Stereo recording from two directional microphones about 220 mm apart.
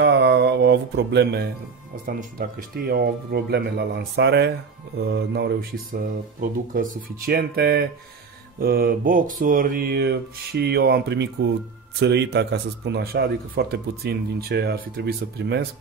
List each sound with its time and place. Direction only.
0.0 s mantra: 50° right (ahead or behind)
2.0 s speech: 40° right (ahead or behind)
8.5 s mantra: 40° right (ahead or behind)
9.4 s speech: 40° right (ahead or behind)